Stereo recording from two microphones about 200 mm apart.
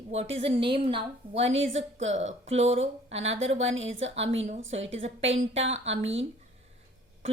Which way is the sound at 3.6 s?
75° right (ahead or behind).